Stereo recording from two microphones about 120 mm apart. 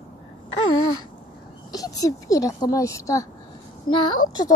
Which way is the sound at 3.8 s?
40° left (ahead or behind).